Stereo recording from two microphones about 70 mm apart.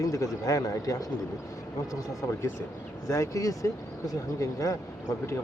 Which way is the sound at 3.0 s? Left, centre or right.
Left.